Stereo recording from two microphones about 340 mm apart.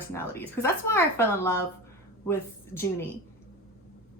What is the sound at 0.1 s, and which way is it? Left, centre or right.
A woman's voice, centre.